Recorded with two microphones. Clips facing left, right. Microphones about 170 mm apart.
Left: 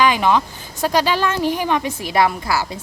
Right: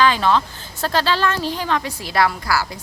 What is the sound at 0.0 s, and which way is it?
A woman's voice, 15° left (ahead or behind).